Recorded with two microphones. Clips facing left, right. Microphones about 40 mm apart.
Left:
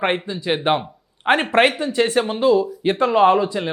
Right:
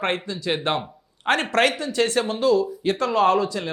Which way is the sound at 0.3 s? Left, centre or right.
Left.